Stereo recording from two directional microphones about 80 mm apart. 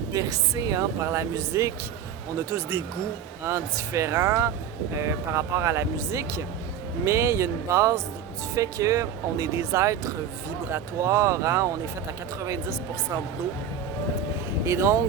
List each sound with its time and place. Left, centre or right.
0.1 s speech: right
14.6 s speech: right